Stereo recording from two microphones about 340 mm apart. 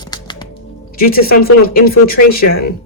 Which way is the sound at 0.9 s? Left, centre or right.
Left.